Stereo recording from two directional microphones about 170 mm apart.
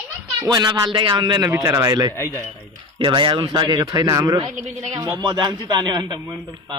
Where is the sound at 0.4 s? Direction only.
20° right (ahead or behind).